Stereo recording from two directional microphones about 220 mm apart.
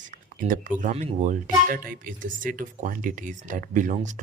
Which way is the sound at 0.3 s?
40° right (ahead or behind).